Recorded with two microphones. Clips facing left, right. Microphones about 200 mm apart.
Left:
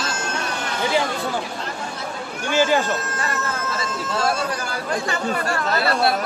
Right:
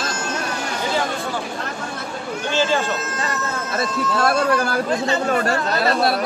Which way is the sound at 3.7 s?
60° right (ahead or behind).